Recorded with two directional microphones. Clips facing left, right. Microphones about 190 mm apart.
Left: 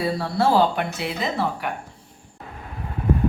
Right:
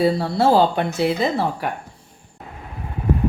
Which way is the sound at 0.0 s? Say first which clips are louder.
Right 4 dB; 25° right (ahead or behind).